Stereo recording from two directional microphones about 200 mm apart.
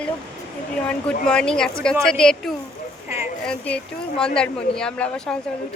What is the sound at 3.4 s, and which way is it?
A woman's voice, 5° left (ahead or behind).